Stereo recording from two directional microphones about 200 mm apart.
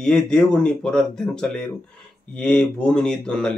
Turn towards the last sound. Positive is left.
turn(degrees=5)  # may be behind; listen again after turning